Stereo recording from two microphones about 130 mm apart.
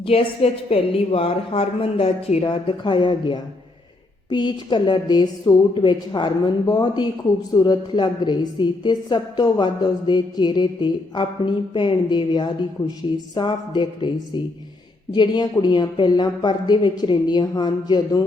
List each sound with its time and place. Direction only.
0.0 s a woman's voice: 45° left (ahead or behind)
15.1 s a woman's voice: 35° left (ahead or behind)